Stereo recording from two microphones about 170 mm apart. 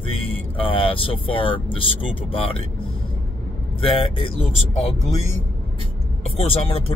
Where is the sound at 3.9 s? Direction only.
30° left (ahead or behind).